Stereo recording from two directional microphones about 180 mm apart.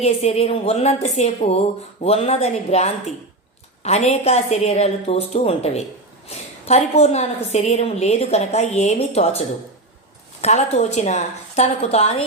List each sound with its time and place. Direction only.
0.0 s a woman's voice: 35° left (ahead or behind)
10.4 s a woman's voice: 35° left (ahead or behind)